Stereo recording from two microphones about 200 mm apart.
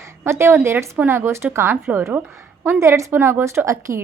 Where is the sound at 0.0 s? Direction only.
15° right (ahead or behind).